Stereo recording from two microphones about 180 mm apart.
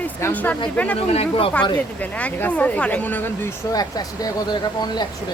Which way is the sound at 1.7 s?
10° left (ahead or behind).